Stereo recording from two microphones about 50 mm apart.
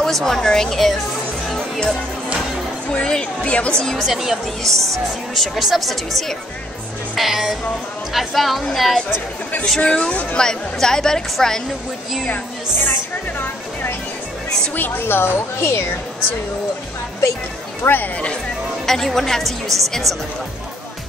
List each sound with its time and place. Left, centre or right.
0.0 s a woman's voice: centre
2.9 s a woman's voice: centre
3.8 s a woman's voice: centre
4.1 s a woman's voice: centre
4.6 s a woman's voice: centre
9.8 s a woman's voice: left
14.8 s speech: left
17.8 s speech: left
18.9 s a woman's voice: centre